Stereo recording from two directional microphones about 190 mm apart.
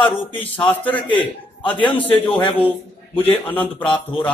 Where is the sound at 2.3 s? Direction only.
25° left (ahead or behind).